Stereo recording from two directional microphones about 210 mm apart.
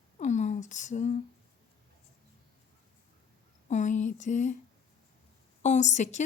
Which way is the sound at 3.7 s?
35° left (ahead or behind).